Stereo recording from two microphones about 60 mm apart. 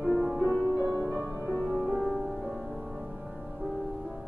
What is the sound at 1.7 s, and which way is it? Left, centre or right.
Music, centre.